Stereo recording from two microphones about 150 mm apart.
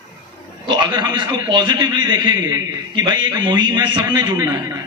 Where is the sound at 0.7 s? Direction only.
30° right (ahead or behind).